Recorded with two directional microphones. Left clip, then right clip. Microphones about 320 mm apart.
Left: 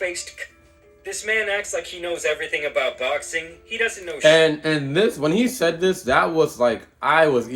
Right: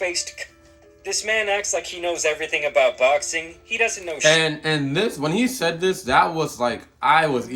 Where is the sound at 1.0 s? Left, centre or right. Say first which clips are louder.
Right 1 dB; centre.